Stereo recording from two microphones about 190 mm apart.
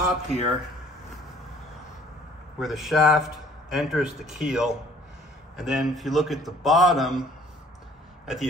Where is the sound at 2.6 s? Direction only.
Centre (ahead or behind).